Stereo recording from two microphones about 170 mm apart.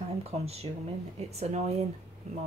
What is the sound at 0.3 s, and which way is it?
A woman's voice, 35° right (ahead or behind).